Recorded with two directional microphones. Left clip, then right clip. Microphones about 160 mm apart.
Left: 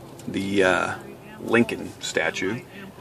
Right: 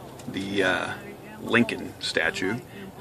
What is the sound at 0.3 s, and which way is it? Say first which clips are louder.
Speech: left 4 dB; 45° left (ahead or behind).